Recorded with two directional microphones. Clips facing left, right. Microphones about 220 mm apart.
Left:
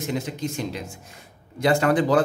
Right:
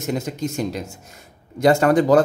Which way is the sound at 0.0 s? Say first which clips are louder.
Right 3 dB; 45° right (ahead or behind).